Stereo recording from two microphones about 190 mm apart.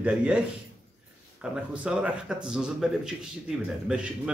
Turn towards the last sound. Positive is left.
turn(degrees=-5)  # may be behind; listen again after turning